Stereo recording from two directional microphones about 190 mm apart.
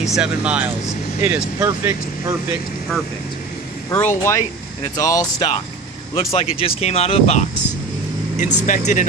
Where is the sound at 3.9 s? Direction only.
15° left (ahead or behind).